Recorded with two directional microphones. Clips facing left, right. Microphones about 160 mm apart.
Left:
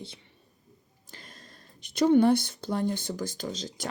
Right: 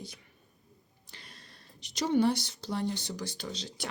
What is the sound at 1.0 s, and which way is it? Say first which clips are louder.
Speech: left 4 dB; 45° left (ahead or behind).